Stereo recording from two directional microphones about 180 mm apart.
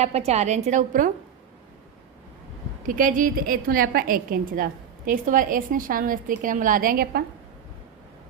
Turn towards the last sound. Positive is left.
turn(degrees=-55)  # may be behind; listen again after turning